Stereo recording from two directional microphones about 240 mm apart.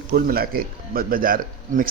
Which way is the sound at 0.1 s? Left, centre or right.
Right.